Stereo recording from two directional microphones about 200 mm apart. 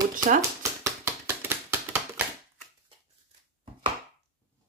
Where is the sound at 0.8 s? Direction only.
15° right (ahead or behind).